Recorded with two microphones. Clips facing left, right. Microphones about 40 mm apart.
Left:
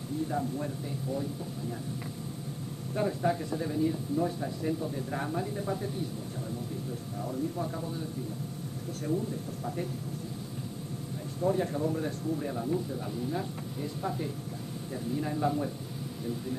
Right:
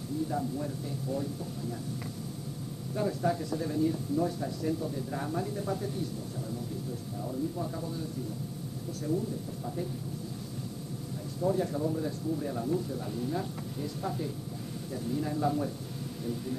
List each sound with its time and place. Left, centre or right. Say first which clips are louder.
0.3 s speech: left 1 dB; left
3.0 s speech: left 1 dB; left
4.9 s speech: left 1 dB; left
5.3 s speech: even; centre
7.5 s speech: left 1 dB; left
11.4 s speech: left 1 dB; left
12.5 s speech: even; centre